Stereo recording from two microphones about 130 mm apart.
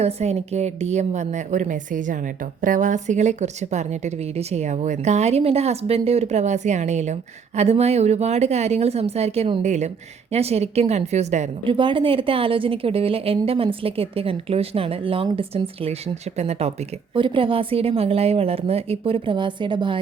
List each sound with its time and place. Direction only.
0.0 s a woman's voice: 55° right (ahead or behind)
11.6 s a woman's voice: 40° right (ahead or behind)
17.2 s a woman's voice: 40° right (ahead or behind)